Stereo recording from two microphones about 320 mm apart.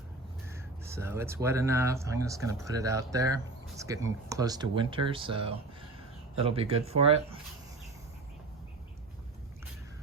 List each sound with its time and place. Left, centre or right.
0.5 s speech: centre